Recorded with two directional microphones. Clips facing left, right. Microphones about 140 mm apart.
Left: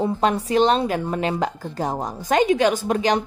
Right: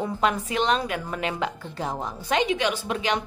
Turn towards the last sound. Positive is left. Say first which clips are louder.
# left 6 dB
turn(degrees=40)  # may be behind; listen again after turning